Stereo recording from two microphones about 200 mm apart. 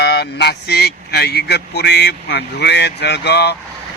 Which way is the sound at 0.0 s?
55° left (ahead or behind).